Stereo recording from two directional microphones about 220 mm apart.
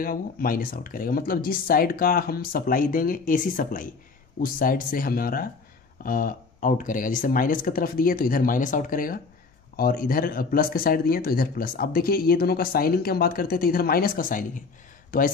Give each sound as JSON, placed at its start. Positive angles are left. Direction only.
{"t": 0.0, "sound": "speech", "side_deg": 40}